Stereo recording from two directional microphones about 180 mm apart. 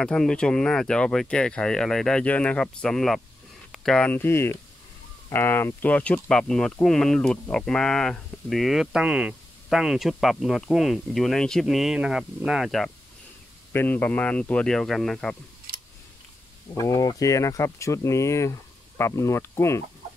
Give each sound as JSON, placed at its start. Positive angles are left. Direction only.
{"t": 0.0, "sound": "speech", "side_deg": 5}
{"t": 16.7, "sound": "speech", "side_deg": 20}